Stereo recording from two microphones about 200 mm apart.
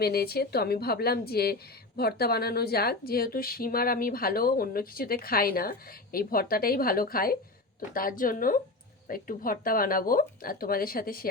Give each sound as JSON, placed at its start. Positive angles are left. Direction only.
{"t": 0.0, "sound": "a woman's voice", "side_deg": 50}